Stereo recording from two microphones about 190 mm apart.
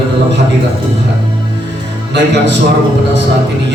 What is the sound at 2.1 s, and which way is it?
Speech, 65° right (ahead or behind).